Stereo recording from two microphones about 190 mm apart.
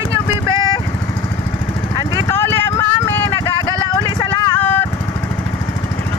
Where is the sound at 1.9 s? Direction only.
15° left (ahead or behind).